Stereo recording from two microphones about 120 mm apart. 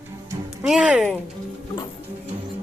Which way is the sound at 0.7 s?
5° right (ahead or behind).